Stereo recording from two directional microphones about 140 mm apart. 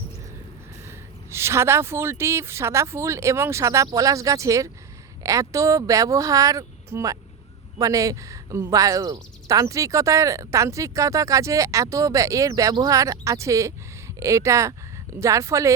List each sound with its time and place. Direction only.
0.9 s speech: 20° right (ahead or behind)